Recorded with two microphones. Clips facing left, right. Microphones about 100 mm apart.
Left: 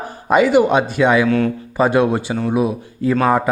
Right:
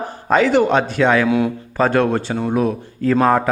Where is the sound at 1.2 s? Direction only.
10° right (ahead or behind).